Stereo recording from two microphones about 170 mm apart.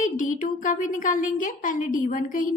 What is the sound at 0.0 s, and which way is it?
A woman's voice, 50° left (ahead or behind).